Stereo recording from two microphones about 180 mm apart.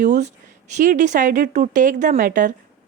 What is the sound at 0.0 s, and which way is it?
Speech, 40° right (ahead or behind).